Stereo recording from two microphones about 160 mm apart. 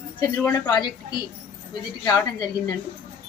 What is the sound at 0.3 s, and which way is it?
A woman's voice, 20° left (ahead or behind).